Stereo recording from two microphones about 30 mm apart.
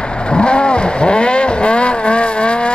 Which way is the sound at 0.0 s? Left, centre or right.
Left.